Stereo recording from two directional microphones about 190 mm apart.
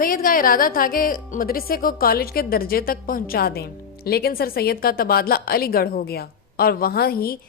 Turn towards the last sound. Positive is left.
turn(degrees=50)  # may be behind; listen again after turning